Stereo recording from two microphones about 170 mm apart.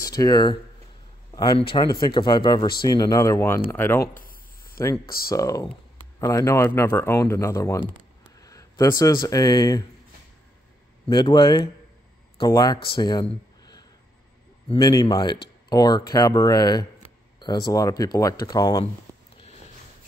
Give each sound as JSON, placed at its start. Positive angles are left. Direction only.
{"t": 0.0, "sound": "speech", "side_deg": 20}
{"t": 1.7, "sound": "speech", "side_deg": 25}
{"t": 4.1, "sound": "a sound", "side_deg": 55}
{"t": 4.7, "sound": "speech", "side_deg": 15}
{"t": 11.1, "sound": "speech", "side_deg": 25}
{"t": 19.1, "sound": "a sound", "side_deg": -20}